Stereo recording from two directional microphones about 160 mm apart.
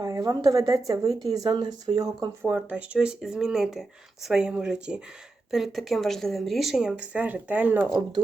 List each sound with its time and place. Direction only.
0.0 s a woman's voice: 25° right (ahead or behind)
2.4 s speech: 10° right (ahead or behind)